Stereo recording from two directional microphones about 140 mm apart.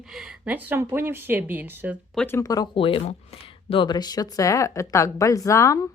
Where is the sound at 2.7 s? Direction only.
40° left (ahead or behind).